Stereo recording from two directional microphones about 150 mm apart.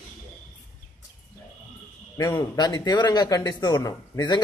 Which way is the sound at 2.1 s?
20° left (ahead or behind).